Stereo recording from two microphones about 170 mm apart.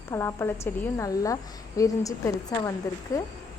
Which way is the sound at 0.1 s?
15° left (ahead or behind).